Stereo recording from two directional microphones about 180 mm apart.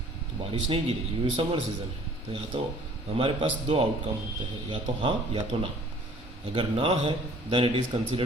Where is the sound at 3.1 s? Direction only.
30° right (ahead or behind).